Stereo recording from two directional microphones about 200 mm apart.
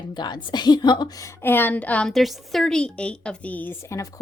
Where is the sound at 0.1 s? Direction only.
20° left (ahead or behind).